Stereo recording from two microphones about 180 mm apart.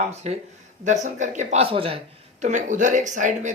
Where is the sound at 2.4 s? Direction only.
45° right (ahead or behind).